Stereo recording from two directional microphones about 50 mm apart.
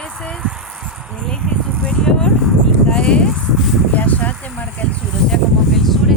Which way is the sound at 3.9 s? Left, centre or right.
Left.